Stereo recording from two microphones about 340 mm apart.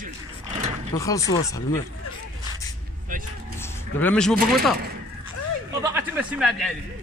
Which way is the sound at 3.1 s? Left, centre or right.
Right.